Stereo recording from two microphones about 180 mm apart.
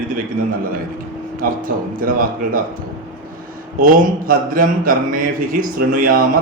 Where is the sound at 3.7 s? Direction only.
50° right (ahead or behind).